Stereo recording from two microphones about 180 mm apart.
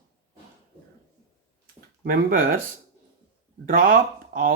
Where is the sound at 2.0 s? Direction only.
50° right (ahead or behind).